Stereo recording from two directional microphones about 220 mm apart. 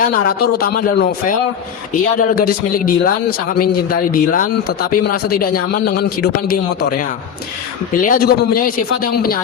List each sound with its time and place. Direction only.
0.0 s speech: 40° left (ahead or behind)
2.5 s speech: 40° left (ahead or behind)
8.0 s speech: 40° left (ahead or behind)